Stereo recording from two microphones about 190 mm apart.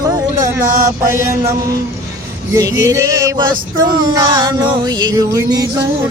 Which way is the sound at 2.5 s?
20° right (ahead or behind).